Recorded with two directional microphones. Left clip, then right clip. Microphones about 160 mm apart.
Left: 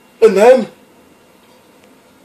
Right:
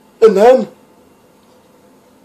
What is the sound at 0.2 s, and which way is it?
Speech, 10° right (ahead or behind).